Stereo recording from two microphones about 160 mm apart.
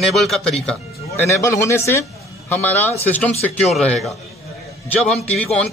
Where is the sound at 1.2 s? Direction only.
15° left (ahead or behind); by 4.1 s centre (ahead or behind).